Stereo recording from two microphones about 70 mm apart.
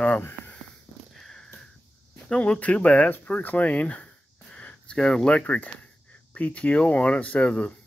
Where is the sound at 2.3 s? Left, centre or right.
Centre.